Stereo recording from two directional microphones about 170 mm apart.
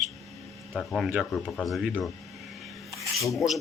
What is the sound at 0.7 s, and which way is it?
Speech, centre (ahead or behind).